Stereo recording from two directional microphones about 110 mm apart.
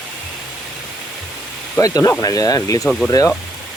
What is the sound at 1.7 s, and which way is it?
Speech, 30° left (ahead or behind).